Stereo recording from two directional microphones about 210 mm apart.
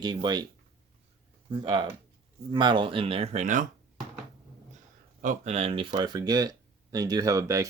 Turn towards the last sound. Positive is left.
turn(degrees=-15)  # may be behind; listen again after turning